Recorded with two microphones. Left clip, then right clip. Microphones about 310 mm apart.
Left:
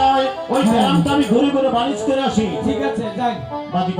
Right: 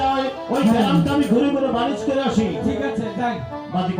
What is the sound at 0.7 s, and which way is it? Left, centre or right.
Speech, centre.